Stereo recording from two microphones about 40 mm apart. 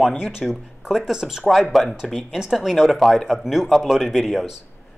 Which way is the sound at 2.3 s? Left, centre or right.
Centre.